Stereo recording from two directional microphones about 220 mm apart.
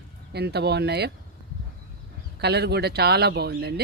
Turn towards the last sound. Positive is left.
turn(degrees=-45)  # may be behind; listen again after turning